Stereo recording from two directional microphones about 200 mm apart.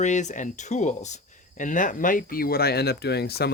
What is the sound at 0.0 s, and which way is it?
Speech, 35° left (ahead or behind).